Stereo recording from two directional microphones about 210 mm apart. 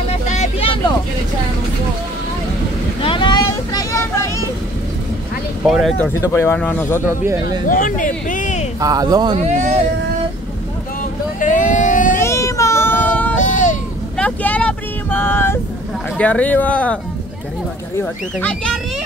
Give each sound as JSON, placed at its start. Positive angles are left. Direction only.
{"t": 0.3, "sound": "vehicle", "side_deg": 30}
{"t": 3.0, "sound": "vehicle", "side_deg": 25}
{"t": 5.7, "sound": "speech", "side_deg": 0}
{"t": 6.2, "sound": "speech", "side_deg": 10}
{"t": 7.4, "sound": "speech", "side_deg": 40}
{"t": 8.7, "sound": "speech", "side_deg": -15}
{"t": 9.4, "sound": "speech", "side_deg": -35}
{"t": 11.3, "sound": "vehicle", "side_deg": 40}
{"t": 12.2, "sound": "child singing", "side_deg": 15}
{"t": 13.4, "sound": "a sound", "side_deg": 35}
{"t": 14.1, "sound": "vehicle", "side_deg": 5}
{"t": 16.2, "sound": "speech", "side_deg": 5}